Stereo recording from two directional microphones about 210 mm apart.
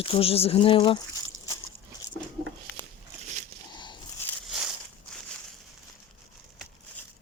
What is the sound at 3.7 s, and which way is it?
Biting, 20° left (ahead or behind).